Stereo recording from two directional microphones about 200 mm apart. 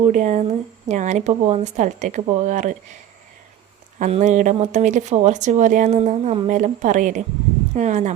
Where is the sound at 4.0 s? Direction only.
35° right (ahead or behind).